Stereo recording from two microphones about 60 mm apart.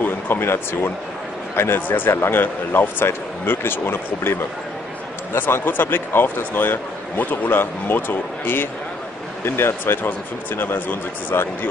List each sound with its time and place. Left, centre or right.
0.0 s a man's voice: left